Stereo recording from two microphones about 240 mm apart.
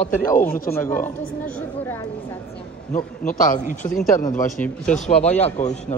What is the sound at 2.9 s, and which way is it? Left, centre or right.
A man's voice, left.